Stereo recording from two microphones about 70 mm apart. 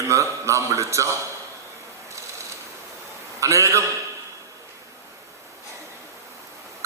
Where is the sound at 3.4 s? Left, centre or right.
Right.